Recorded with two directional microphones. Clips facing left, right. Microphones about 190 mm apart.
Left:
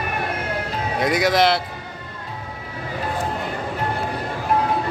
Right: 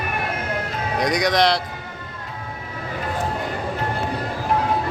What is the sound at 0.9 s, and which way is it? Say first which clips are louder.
Speech: left 1 dB; 5° left (ahead or behind).